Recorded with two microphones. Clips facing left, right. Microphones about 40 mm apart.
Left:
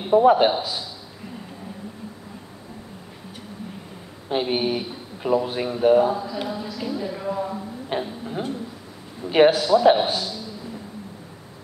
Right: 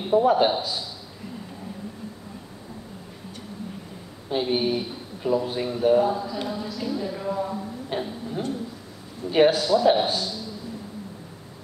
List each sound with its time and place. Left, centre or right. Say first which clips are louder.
0.1 s speech: left 4 dB; left
0.5 s speech: left 2 dB; centre
4.3 s speech: left 1 dB; left
6.1 s speech: left 1 dB; centre
7.9 s tick-tock: left 3 dB; left
9.5 s speech: left 3 dB; centre